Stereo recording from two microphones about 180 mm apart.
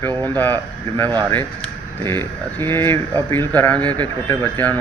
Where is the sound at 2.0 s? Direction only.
10° left (ahead or behind).